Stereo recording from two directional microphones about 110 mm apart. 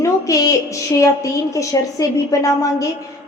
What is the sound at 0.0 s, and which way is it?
A woman's voice, 30° left (ahead or behind).